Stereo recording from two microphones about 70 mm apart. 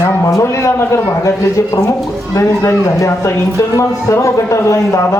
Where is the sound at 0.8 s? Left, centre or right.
Left.